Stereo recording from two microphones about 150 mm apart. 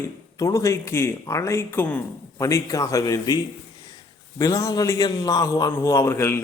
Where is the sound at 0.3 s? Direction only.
20° left (ahead or behind).